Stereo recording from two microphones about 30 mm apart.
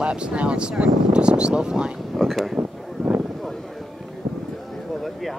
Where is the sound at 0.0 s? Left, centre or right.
Right.